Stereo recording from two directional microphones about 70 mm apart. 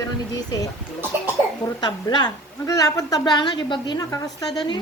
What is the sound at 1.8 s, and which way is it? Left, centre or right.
A woman's voice, left.